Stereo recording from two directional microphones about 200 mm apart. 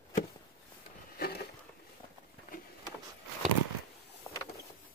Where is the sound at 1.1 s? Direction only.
50° left (ahead or behind).